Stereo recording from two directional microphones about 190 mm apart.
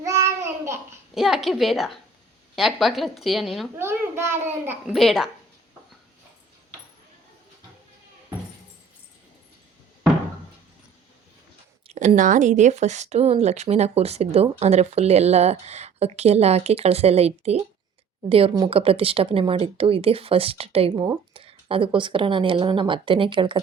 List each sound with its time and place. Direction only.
0.0 s child singing: 15° right (ahead or behind)
1.1 s a woman's voice: centre (ahead or behind)
3.8 s a child's voice: 15° right (ahead or behind)
11.9 s speech: 40° right (ahead or behind)